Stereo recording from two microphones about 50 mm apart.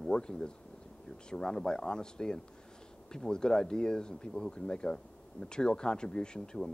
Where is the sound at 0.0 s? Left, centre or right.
Centre.